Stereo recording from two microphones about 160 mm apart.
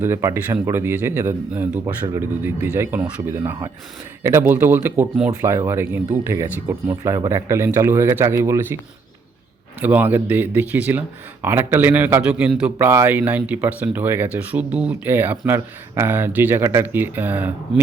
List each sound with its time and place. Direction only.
0.0 s a man's voice: 15° right (ahead or behind)
9.8 s a man's voice: 10° right (ahead or behind)